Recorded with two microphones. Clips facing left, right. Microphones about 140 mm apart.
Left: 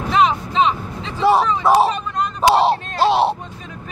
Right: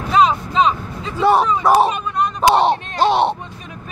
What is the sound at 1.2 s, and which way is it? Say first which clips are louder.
Speech: right 1 dB; centre (ahead or behind).